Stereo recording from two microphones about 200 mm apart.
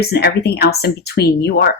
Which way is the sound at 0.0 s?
55° left (ahead or behind).